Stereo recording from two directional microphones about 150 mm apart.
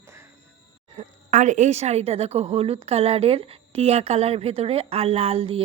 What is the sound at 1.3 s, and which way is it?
A woman's voice, 55° right (ahead or behind).